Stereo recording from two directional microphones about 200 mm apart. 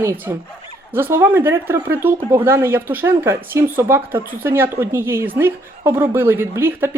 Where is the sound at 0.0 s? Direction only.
15° right (ahead or behind).